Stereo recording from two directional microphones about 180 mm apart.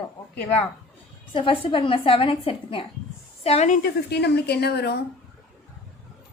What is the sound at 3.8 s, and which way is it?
Speech, 65° left (ahead or behind).